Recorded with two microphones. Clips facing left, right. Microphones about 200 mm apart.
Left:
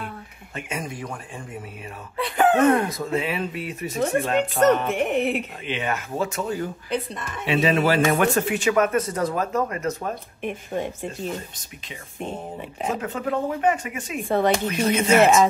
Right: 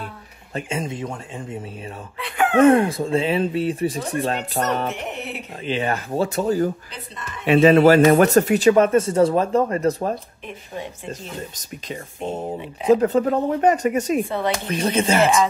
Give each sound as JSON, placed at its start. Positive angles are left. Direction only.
{"t": 0.6, "sound": "speech", "side_deg": -25}
{"t": 2.6, "sound": "speech", "side_deg": -30}
{"t": 4.9, "sound": "speech", "side_deg": 55}
{"t": 5.7, "sound": "a man's voice", "side_deg": -35}
{"t": 7.4, "sound": "a man's voice", "side_deg": -50}
{"t": 14.7, "sound": "a man's voice", "side_deg": -30}